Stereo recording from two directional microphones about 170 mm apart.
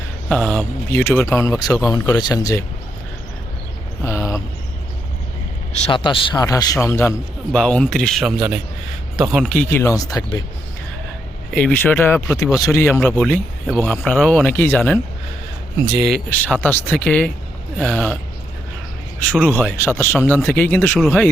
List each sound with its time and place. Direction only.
0.3 s speech: 5° left (ahead or behind); by 2.6 s 20° left (ahead or behind)
4.0 s a sound: 15° left (ahead or behind)
5.8 s speech: 30° left (ahead or behind)
7.5 s speech: 5° left (ahead or behind); by 10.4 s 20° left (ahead or behind)
11.5 s speech: 10° left (ahead or behind)
16.4 s speech: 10° left (ahead or behind)
19.4 s speech: 5° left (ahead or behind)
21.0 s speech: centre (ahead or behind)